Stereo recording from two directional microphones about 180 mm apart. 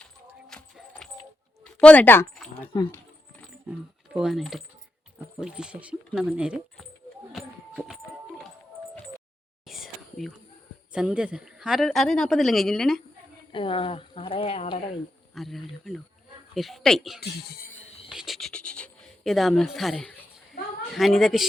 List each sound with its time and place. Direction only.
0.0 s keys jangling: 5° left (ahead or behind)
1.6 s speech: 5° left (ahead or behind)
3.4 s speech: 5° right (ahead or behind)
7.3 s a sound: 5° right (ahead or behind)
9.6 s whispering: centre (ahead or behind)
10.9 s speech: 5° right (ahead or behind)
13.5 s speech: 30° left (ahead or behind)
15.4 s speech: centre (ahead or behind)
17.2 s speech: 60° left (ahead or behind)
18.1 s music: centre (ahead or behind)